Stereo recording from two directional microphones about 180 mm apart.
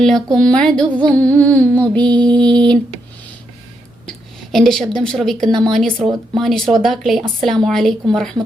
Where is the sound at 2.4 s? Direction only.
5° left (ahead or behind).